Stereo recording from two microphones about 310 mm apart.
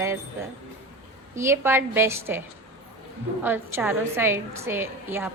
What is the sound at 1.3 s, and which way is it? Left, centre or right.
Speech, centre.